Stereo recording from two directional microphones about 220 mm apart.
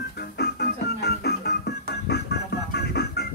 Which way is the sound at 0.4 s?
45° left (ahead or behind).